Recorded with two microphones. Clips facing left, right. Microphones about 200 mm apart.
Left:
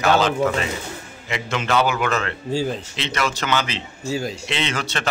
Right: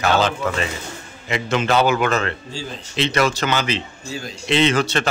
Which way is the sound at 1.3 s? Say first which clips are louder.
Right 3 dB; 35° right (ahead or behind).